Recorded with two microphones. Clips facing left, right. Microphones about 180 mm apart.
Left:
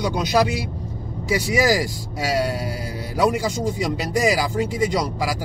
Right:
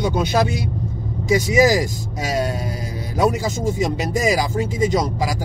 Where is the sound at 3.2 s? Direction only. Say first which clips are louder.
Right 1 dB; 25° right (ahead or behind).